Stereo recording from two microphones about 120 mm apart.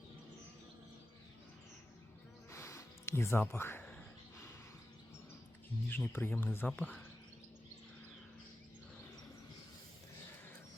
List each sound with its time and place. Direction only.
2.5 s gasp: 25° left (ahead or behind)
5.9 s speech: 15° left (ahead or behind)